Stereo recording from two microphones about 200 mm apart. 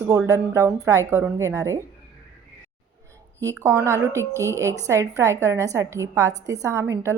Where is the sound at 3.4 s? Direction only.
15° right (ahead or behind).